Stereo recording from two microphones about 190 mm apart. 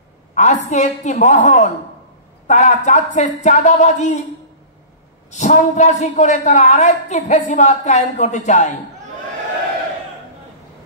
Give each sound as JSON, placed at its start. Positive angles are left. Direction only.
{"t": 0.3, "sound": "a sound", "side_deg": 40}
{"t": 0.7, "sound": "a man's voice", "side_deg": 35}
{"t": 5.3, "sound": "a man's voice", "side_deg": 40}